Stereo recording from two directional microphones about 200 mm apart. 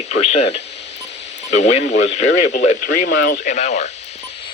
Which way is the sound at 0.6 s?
60° left (ahead or behind).